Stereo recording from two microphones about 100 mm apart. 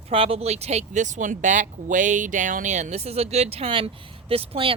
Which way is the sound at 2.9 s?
90° right.